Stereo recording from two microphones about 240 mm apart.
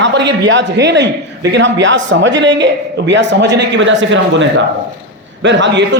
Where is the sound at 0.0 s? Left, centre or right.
Right.